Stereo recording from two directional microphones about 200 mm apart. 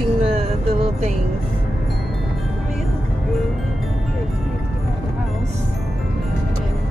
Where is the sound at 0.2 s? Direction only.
30° right (ahead or behind).